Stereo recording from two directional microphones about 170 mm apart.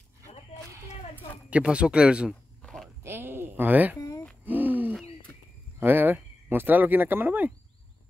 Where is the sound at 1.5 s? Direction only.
5° right (ahead or behind).